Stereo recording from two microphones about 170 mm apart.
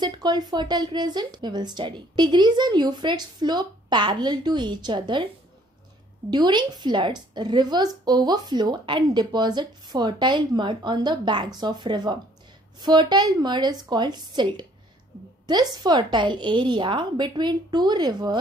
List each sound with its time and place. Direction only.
0.0 s a woman's voice: 25° right (ahead or behind)
6.3 s a woman's voice: 25° right (ahead or behind)